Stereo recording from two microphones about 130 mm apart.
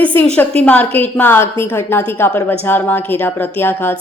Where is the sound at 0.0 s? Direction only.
15° left (ahead or behind).